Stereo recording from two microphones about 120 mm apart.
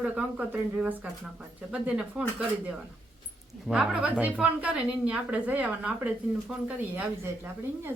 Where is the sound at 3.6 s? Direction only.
5° right (ahead or behind).